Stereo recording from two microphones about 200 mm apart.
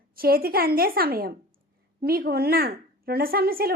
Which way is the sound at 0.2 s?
50° right (ahead or behind).